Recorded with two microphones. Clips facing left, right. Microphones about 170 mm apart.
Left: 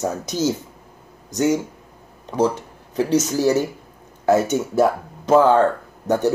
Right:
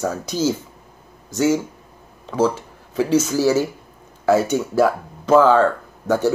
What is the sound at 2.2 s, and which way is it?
Speech, 15° left (ahead or behind).